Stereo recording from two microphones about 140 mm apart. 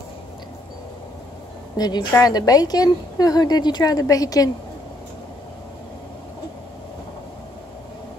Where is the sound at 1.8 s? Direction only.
30° left (ahead or behind).